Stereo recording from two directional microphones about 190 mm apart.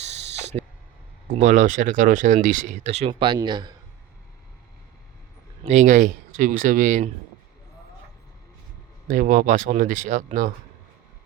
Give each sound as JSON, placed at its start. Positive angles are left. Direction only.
{"t": 0.3, "sound": "a sound", "side_deg": -35}
{"t": 1.3, "sound": "speech", "side_deg": -40}
{"t": 5.6, "sound": "speech", "side_deg": -40}
{"t": 9.0, "sound": "speech", "side_deg": -45}